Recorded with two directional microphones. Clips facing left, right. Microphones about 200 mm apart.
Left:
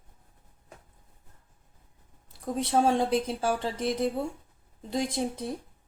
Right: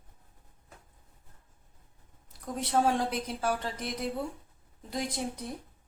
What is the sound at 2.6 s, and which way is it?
Speech, 25° left (ahead or behind).